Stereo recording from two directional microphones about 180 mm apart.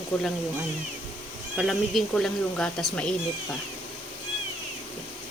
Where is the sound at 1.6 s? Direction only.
Centre (ahead or behind).